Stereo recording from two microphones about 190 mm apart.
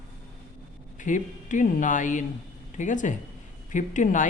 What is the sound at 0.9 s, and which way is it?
A man's voice, 40° left (ahead or behind).